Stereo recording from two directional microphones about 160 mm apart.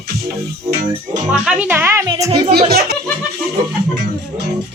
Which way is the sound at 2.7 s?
75° right (ahead or behind).